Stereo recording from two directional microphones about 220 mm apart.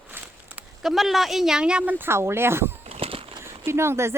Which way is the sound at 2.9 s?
25° right (ahead or behind).